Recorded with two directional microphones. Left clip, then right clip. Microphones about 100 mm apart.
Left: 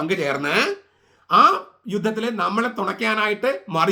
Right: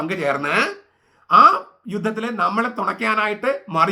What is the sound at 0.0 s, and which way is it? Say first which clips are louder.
Speech: right 1 dB; 25° left (ahead or behind).